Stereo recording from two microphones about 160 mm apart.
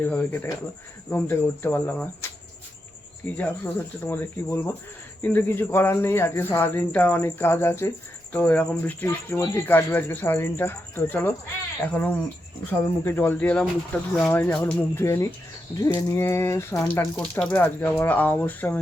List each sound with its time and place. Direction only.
0.0 s speech: 10° left (ahead or behind)
3.3 s speech: 10° left (ahead or behind)